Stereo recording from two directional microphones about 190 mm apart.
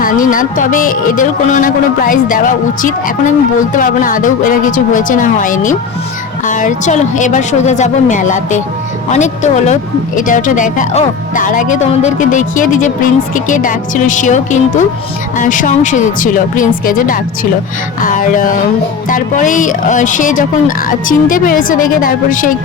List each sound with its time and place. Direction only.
0.0 s speech: 45° left (ahead or behind)